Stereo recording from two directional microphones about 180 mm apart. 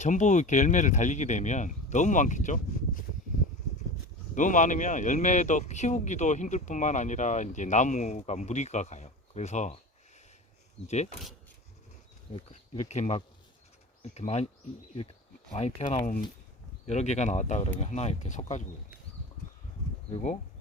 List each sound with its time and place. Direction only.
0.0 s speech: 45° left (ahead or behind)
4.4 s speech: 45° left (ahead or behind)
10.8 s speech: 40° left (ahead or behind)
12.3 s speech: 35° left (ahead or behind)
15.5 s speech: 35° left (ahead or behind)
20.1 s speech: 35° left (ahead or behind)